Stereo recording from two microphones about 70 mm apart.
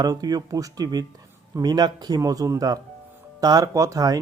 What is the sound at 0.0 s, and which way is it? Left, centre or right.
Speech, right.